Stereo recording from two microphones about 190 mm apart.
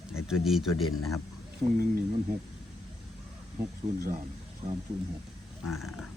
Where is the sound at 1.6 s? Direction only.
30° right (ahead or behind).